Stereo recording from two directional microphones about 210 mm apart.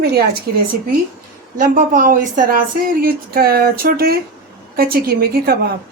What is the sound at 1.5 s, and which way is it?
A woman's voice, 40° right (ahead or behind).